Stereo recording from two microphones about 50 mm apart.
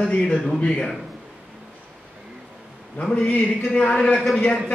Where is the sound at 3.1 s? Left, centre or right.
Left.